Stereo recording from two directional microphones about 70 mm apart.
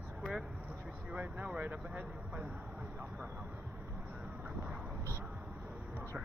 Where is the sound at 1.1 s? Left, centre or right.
Centre.